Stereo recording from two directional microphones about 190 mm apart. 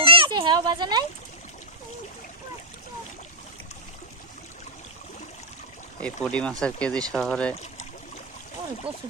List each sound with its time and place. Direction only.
0.0 s a sound: 30° right (ahead or behind)
6.0 s speech: 5° left (ahead or behind)
8.9 s speech: 30° right (ahead or behind)